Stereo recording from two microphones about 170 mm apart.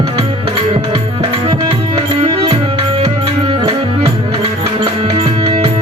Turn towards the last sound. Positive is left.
turn(degrees=-30)  # may be behind; listen again after turning